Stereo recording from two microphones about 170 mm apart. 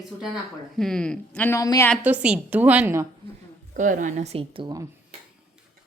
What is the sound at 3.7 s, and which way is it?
A woman's voice, 50° right (ahead or behind).